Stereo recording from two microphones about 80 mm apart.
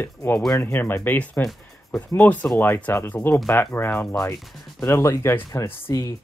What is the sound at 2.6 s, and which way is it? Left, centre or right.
Speech, left.